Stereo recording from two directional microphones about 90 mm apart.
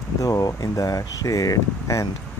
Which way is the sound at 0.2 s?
40° left (ahead or behind).